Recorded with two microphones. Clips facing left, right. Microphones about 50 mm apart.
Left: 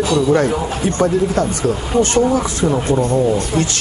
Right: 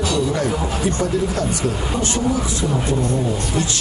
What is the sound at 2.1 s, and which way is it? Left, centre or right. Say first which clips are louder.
Speech: left 6 dB; left.